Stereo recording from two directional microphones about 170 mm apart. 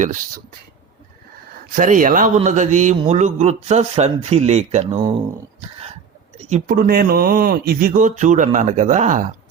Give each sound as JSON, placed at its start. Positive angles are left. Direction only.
{"t": 1.7, "sound": "speech", "side_deg": -50}
{"t": 6.4, "sound": "speech", "side_deg": -50}